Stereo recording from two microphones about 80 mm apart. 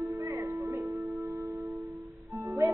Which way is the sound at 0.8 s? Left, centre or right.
Centre.